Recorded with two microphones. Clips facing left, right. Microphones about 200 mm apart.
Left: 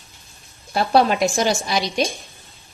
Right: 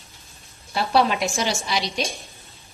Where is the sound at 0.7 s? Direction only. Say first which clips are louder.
Left 3 dB; 45° left (ahead or behind).